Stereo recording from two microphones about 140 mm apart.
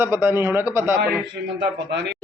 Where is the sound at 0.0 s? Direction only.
15° right (ahead or behind).